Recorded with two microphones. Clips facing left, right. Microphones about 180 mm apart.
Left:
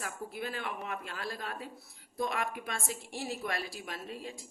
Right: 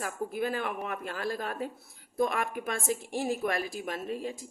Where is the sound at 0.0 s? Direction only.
45° right (ahead or behind).